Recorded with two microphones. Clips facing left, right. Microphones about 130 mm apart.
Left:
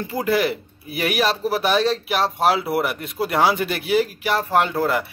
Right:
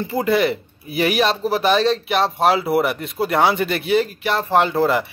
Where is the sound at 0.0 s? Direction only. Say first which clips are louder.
Right 3 dB; centre (ahead or behind).